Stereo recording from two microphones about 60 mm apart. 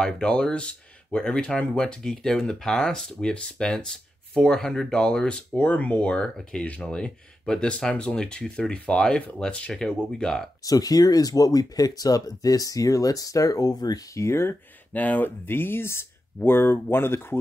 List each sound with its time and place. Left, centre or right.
0.0 s speech: centre
5.6 s speech: left
10.6 s speech: left
14.2 s speech: left
14.9 s speech: left